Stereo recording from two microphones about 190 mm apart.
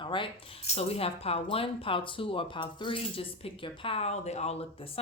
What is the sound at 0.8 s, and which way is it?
Speech, 30° left (ahead or behind).